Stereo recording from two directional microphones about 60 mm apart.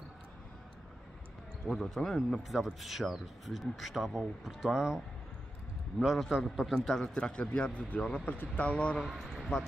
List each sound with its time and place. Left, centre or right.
1.7 s speech: centre
6.2 s speech: centre; by 8.9 s left
8.9 s speech: centre